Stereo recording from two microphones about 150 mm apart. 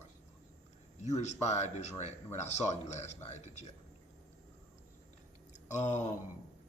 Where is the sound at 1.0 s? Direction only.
50° left (ahead or behind).